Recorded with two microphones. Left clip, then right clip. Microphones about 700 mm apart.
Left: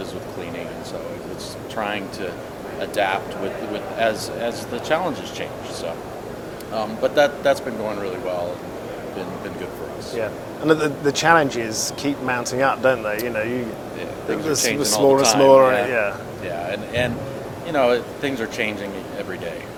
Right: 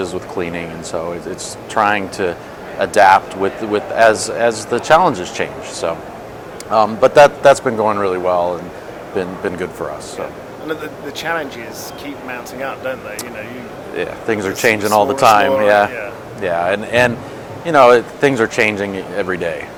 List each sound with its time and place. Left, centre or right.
1.7 s speech: right
10.7 s speech: left
14.0 s speech: right